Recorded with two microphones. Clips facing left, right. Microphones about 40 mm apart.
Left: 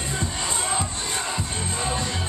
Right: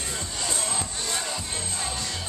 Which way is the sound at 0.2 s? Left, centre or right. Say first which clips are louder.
Left 3 dB; left.